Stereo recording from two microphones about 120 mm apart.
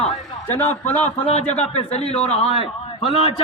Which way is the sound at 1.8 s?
60° left (ahead or behind).